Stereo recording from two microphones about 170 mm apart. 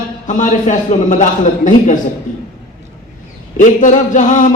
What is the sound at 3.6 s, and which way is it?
Speech, 50° left (ahead or behind).